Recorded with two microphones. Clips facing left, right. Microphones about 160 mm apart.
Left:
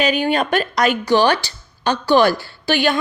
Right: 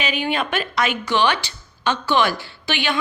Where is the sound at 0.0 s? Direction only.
40° left (ahead or behind).